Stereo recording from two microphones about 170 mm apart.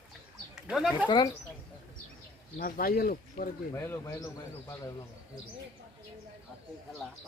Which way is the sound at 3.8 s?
15° left (ahead or behind).